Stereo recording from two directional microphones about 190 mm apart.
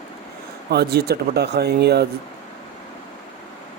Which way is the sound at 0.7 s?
60° right (ahead or behind).